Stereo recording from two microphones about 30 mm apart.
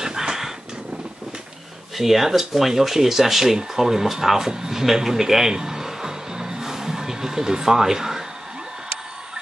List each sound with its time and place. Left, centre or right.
0.0 s dog: right
2.0 s speech: centre
5.5 s music: centre